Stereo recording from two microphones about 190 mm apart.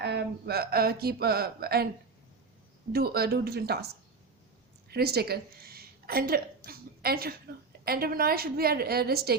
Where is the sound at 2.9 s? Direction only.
55° right (ahead or behind).